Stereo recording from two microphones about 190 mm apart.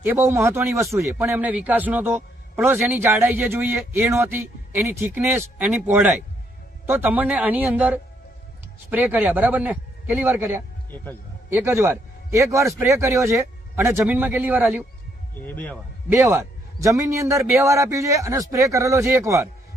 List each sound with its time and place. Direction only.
0.0 s a man's voice: 10° right (ahead or behind)
10.9 s speech: 10° left (ahead or behind)
11.5 s a man's voice: 15° right (ahead or behind)
15.4 s speech: 10° left (ahead or behind)
16.0 s a man's voice: 15° right (ahead or behind)